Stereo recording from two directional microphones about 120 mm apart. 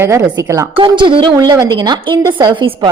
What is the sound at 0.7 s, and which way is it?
A woman's voice, 40° right (ahead or behind).